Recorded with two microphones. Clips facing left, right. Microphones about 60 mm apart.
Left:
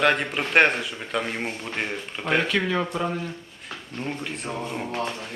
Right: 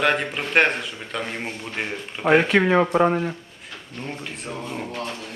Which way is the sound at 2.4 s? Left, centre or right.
Right.